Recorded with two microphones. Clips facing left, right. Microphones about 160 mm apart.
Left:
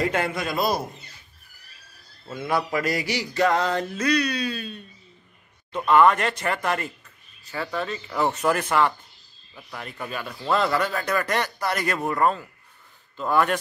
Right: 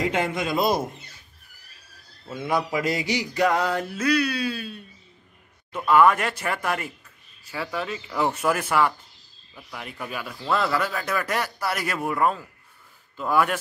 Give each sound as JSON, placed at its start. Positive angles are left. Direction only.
{"t": 0.0, "sound": "a man's voice", "side_deg": -20}
{"t": 2.2, "sound": "mantra", "side_deg": -15}
{"t": 5.9, "sound": "mantra", "side_deg": -5}
{"t": 10.4, "sound": "speech", "side_deg": 0}
{"t": 13.2, "sound": "mantra", "side_deg": -5}